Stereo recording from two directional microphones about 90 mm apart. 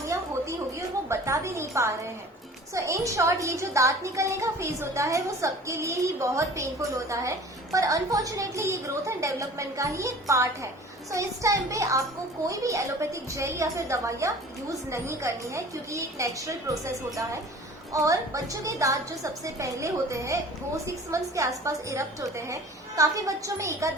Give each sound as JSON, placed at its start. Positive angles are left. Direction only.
{"t": 0.1, "sound": "music", "side_deg": -35}
{"t": 2.7, "sound": "a woman's voice", "side_deg": -35}